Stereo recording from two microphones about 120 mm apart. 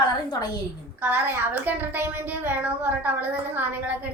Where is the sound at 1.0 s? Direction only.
15° right (ahead or behind).